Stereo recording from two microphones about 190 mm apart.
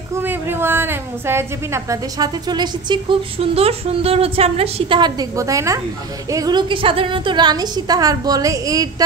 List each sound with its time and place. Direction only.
0.2 s a woman's voice: 10° right (ahead or behind)